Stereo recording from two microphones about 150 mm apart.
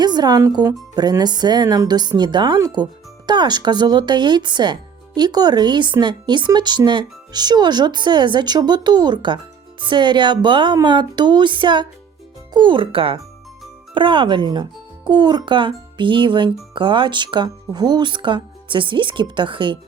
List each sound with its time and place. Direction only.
0.0 s speech: 30° right (ahead or behind)